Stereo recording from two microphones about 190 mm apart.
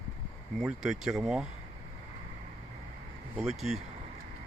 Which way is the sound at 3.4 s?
Centre (ahead or behind).